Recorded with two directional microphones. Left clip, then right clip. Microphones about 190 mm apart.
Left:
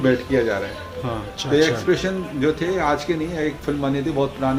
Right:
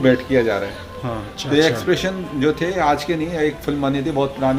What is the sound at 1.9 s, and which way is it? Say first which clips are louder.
Speech: right 1 dB; 45° right (ahead or behind).